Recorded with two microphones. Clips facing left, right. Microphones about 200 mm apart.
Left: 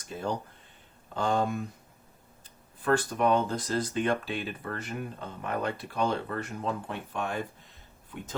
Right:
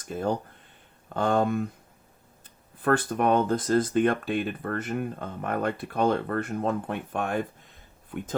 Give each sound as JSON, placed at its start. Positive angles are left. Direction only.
{"t": 0.0, "sound": "speech", "side_deg": -55}
{"t": 2.8, "sound": "speech", "side_deg": -55}